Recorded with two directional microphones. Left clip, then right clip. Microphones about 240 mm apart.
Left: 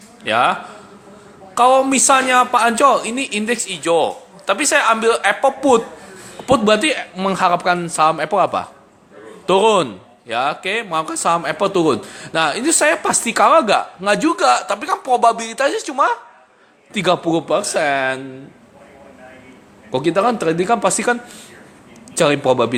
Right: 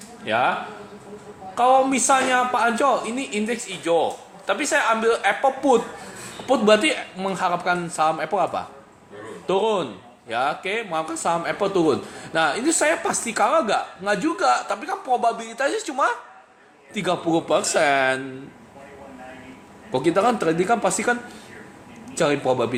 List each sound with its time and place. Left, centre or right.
0.3 s a man's voice: left
1.5 s a man's voice: left; by 18.2 s centre
19.9 s a man's voice: centre